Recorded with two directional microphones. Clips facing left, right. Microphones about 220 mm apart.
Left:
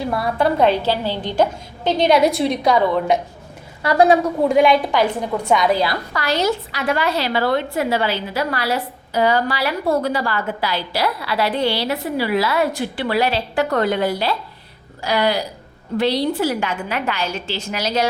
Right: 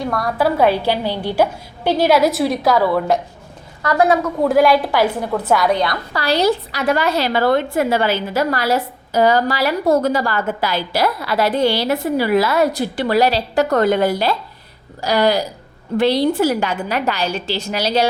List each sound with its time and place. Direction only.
0.0 s a woman's voice: 5° left (ahead or behind)
3.8 s a woman's voice: 15° left (ahead or behind)
4.4 s a woman's voice: centre (ahead or behind)
6.1 s a woman's voice: 35° right (ahead or behind)